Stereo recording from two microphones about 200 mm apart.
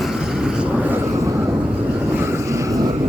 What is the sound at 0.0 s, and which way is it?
Vehicle, centre (ahead or behind).